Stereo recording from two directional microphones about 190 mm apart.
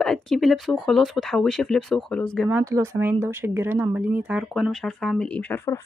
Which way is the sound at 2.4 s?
15° right (ahead or behind).